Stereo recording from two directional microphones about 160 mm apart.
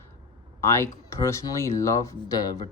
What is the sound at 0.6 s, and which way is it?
Speech, 15° left (ahead or behind).